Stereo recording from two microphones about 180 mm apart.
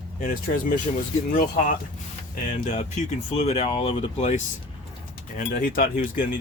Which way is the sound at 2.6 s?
40° left (ahead or behind).